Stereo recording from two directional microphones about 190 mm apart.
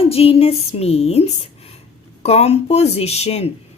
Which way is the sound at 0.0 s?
30° left (ahead or behind).